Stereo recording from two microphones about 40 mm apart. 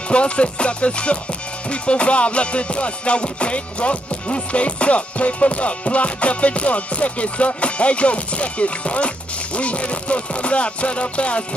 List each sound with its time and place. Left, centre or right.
0.1 s music: left